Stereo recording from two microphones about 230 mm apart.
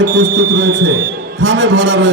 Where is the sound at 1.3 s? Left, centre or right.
Right.